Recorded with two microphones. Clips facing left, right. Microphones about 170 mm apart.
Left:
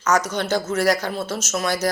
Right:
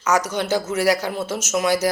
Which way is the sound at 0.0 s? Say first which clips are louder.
Even; 10° right (ahead or behind).